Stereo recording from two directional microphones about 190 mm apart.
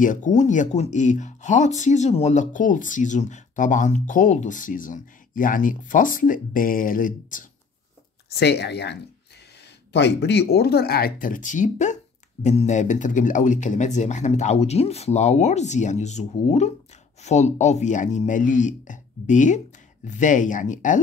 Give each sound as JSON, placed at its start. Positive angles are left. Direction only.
{"t": 0.0, "sound": "speech", "side_deg": 40}
{"t": 8.4, "sound": "speech", "side_deg": 60}
{"t": 9.9, "sound": "speech", "side_deg": 65}